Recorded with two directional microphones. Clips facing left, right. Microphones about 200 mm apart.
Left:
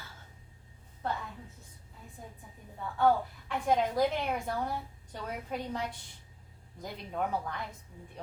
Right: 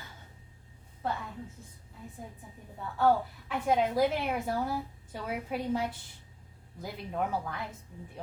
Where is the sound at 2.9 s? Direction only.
5° right (ahead or behind).